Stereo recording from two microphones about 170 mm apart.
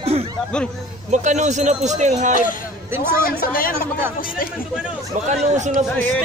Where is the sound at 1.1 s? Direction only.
45° right (ahead or behind).